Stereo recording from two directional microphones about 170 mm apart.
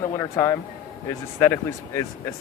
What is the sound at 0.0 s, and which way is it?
Speech, 15° left (ahead or behind).